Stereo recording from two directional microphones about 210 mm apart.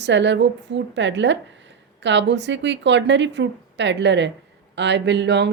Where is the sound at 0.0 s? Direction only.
55° right (ahead or behind).